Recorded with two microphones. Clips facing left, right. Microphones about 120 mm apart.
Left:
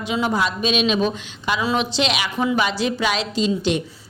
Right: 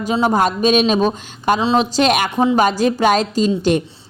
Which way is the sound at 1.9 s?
50° right (ahead or behind).